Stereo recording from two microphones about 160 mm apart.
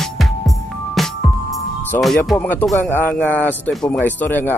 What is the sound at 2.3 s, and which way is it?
A man's voice, 10° left (ahead or behind).